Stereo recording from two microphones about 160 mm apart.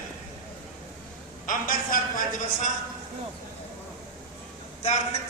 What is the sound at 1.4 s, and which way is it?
Speech, 60° left (ahead or behind).